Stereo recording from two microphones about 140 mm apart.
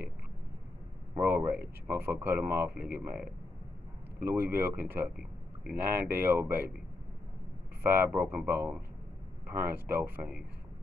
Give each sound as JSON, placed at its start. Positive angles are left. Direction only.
{"t": 1.1, "sound": "speech", "side_deg": -15}
{"t": 7.8, "sound": "speech", "side_deg": -15}
{"t": 9.8, "sound": "speech", "side_deg": -15}